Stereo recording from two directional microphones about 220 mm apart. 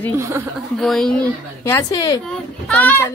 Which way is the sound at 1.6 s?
15° left (ahead or behind).